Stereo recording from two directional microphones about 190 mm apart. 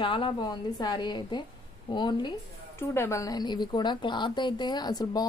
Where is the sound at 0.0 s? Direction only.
25° left (ahead or behind).